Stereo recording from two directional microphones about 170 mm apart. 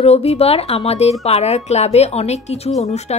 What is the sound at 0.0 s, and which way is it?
A woman's voice, 40° left (ahead or behind).